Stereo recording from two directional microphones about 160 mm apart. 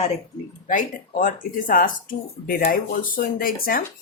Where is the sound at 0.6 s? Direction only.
55° left (ahead or behind).